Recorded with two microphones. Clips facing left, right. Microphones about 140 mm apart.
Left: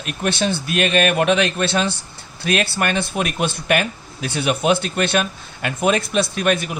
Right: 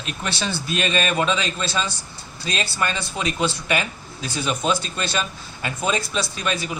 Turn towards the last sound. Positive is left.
turn(degrees=60)  # may be behind; listen again after turning